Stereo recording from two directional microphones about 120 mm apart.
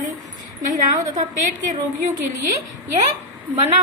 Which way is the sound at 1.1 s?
90° right.